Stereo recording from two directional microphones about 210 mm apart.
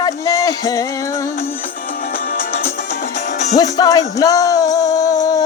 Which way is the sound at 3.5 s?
15° left (ahead or behind).